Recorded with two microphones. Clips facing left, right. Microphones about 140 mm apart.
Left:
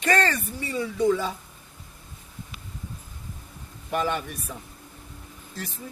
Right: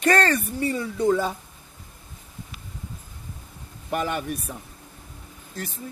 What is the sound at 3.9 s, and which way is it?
Speech, 50° right (ahead or behind).